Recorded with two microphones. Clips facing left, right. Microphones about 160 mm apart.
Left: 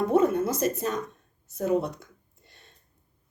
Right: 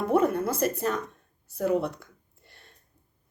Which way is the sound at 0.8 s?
20° left (ahead or behind).